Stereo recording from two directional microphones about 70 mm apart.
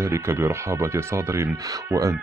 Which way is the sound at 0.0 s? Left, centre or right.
Right.